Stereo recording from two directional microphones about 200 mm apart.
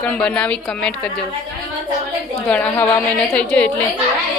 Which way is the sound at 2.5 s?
10° left (ahead or behind).